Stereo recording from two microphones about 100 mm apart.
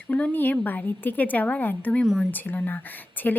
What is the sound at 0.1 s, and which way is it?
A woman's voice, 15° left (ahead or behind).